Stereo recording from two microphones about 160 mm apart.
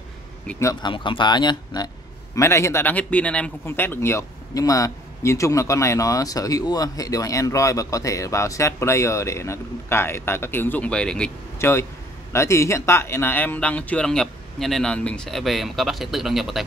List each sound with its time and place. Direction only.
0.5 s a man's voice: 15° left (ahead or behind)
0.8 s a man's voice: 30° left (ahead or behind); by 11.3 s 5° left (ahead or behind)
11.5 s vehicle: 15° left (ahead or behind)
12.3 s speech: 15° left (ahead or behind); by 16.6 s centre (ahead or behind)